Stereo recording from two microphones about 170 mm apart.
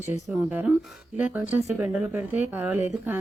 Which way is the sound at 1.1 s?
10° right (ahead or behind).